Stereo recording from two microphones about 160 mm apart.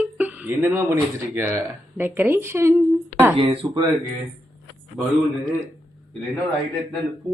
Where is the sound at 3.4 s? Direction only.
30° right (ahead or behind).